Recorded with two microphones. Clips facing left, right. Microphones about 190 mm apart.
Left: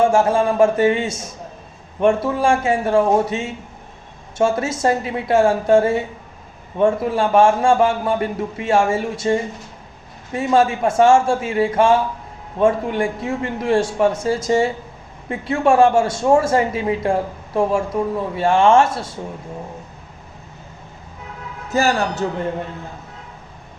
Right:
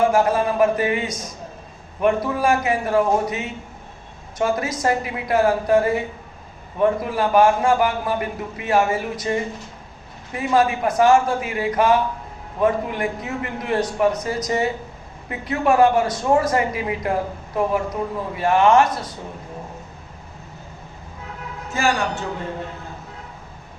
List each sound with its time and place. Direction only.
0.0 s a man's voice: 25° left (ahead or behind)
21.7 s a man's voice: 40° left (ahead or behind)